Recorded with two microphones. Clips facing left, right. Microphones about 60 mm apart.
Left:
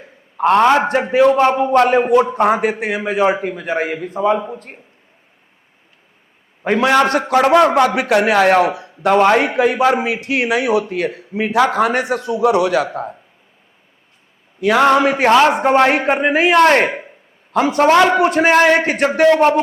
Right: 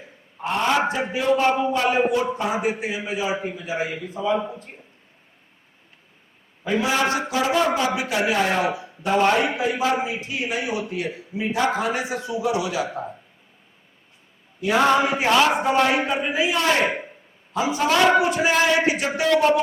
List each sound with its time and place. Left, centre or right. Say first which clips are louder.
0.3 s a man's voice: left 10 dB; left
6.7 s a man's voice: left 8 dB; left
10.8 s a man's voice: left 7 dB; left
14.6 s a man's voice: left 6 dB; left
15.6 s a man's voice: left 7 dB; left